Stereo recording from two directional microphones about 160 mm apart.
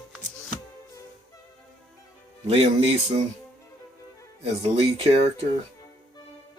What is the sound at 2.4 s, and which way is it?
Speech, 40° right (ahead or behind).